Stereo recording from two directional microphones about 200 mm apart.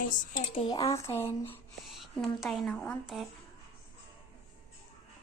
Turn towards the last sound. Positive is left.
turn(degrees=0)  # may be behind; listen again after turning